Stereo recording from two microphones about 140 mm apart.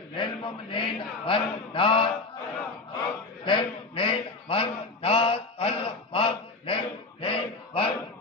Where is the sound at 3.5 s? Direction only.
35° left (ahead or behind).